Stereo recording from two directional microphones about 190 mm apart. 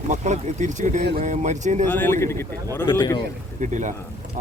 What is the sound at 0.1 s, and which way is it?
Speech, 40° right (ahead or behind).